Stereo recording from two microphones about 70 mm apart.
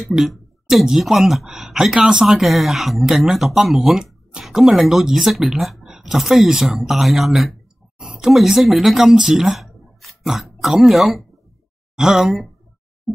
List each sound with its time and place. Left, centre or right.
0.1 s speech: centre